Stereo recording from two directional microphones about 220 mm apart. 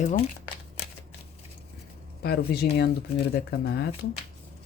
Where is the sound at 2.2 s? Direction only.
45° left (ahead or behind).